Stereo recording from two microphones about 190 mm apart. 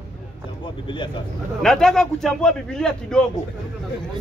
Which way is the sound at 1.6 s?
Centre (ahead or behind).